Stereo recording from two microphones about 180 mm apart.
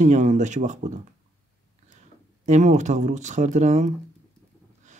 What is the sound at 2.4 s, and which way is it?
Speech, 40° right (ahead or behind).